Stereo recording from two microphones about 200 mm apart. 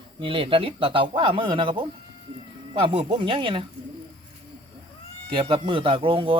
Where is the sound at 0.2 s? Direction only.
25° right (ahead or behind).